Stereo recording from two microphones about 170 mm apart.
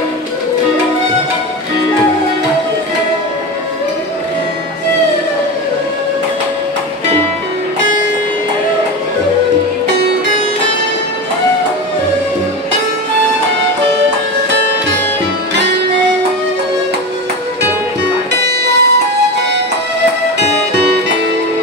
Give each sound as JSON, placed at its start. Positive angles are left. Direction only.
{"t": 18.4, "sound": "music", "side_deg": -85}
{"t": 20.3, "sound": "music", "side_deg": -85}